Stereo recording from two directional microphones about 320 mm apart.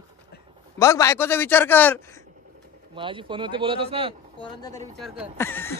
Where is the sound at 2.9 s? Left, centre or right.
Centre.